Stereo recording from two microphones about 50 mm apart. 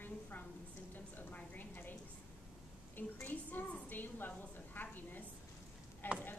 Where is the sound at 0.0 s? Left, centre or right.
Left.